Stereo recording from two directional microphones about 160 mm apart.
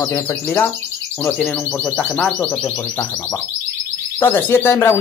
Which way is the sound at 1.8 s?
5° left (ahead or behind).